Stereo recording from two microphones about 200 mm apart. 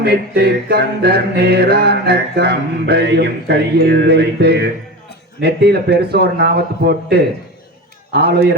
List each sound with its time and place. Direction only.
0.0 s music: 50° right (ahead or behind)
5.4 s a man's voice: 55° right (ahead or behind)